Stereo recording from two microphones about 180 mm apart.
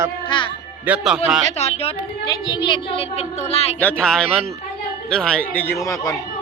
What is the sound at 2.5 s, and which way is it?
Speech, 25° left (ahead or behind).